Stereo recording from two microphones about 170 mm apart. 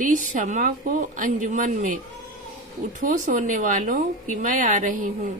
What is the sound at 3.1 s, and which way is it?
Speech, 50° right (ahead or behind).